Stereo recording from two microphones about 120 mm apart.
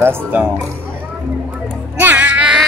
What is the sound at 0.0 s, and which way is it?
Speech, 20° right (ahead or behind).